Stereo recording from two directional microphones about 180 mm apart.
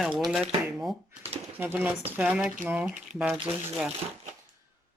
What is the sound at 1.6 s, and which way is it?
Speech, 10° right (ahead or behind).